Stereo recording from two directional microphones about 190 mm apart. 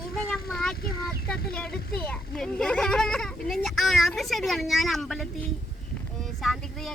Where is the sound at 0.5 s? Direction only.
Centre (ahead or behind).